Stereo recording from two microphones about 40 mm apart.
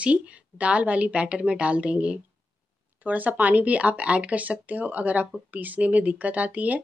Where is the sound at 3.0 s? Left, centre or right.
Right.